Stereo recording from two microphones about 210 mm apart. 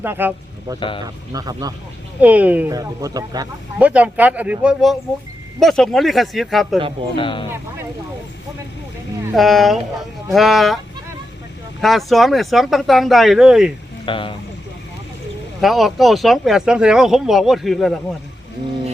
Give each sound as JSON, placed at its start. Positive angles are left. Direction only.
{"t": 0.0, "sound": "speech", "side_deg": -10}
{"t": 0.8, "sound": "speech", "side_deg": 25}
{"t": 1.0, "sound": "speech", "side_deg": -15}
{"t": 2.2, "sound": "speech", "side_deg": -5}
{"t": 3.8, "sound": "speech", "side_deg": -5}
{"t": 7.2, "sound": "speech", "side_deg": 25}
{"t": 9.3, "sound": "speech", "side_deg": 0}
{"t": 11.8, "sound": "speech", "side_deg": 0}
{"t": 14.0, "sound": "speech", "side_deg": 25}
{"t": 15.6, "sound": "speech", "side_deg": 0}